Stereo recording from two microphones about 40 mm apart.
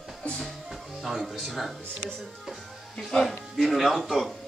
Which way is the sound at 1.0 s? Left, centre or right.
Centre.